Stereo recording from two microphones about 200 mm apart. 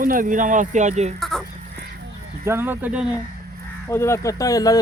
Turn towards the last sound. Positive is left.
turn(degrees=15)  # may be behind; listen again after turning